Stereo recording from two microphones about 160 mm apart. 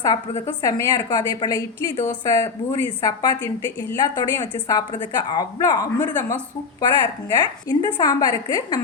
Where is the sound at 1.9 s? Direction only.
50° left (ahead or behind).